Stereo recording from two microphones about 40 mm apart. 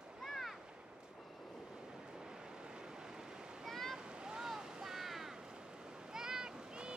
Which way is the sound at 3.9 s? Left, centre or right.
Right.